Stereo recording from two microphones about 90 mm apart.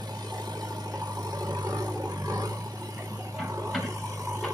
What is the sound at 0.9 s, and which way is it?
Vehicle, 45° right (ahead or behind).